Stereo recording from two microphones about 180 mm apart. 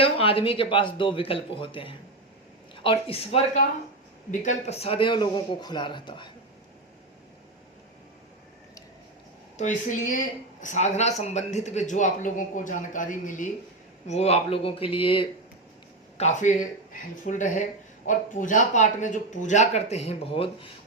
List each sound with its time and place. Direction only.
0.0 s a man's voice: 30° left (ahead or behind)
9.6 s speech: 45° left (ahead or behind)
16.1 s speech: 40° left (ahead or behind)